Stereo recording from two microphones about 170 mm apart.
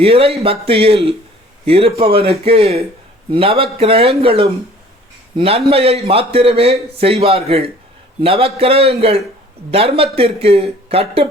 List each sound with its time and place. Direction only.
0.0 s a man's voice: 35° right (ahead or behind)